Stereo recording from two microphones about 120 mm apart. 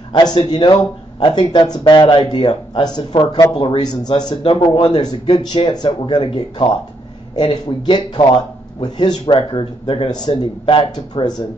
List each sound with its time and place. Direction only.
0.1 s speech: 40° left (ahead or behind)
10.6 s speech: 50° left (ahead or behind)